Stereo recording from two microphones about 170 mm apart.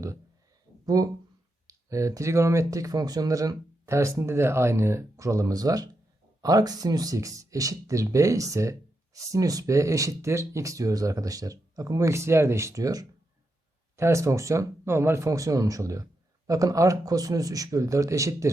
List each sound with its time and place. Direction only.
0.9 s speech: 20° right (ahead or behind)